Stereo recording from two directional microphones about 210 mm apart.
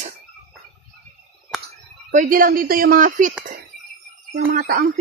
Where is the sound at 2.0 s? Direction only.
40° right (ahead or behind).